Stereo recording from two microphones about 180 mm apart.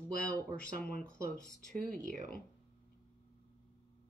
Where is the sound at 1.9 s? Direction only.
45° right (ahead or behind).